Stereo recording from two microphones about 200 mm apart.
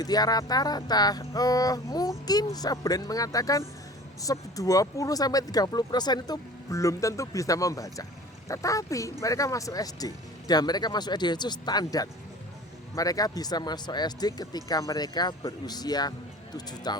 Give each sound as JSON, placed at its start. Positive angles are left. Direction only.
{"t": 0.0, "sound": "speech", "side_deg": 20}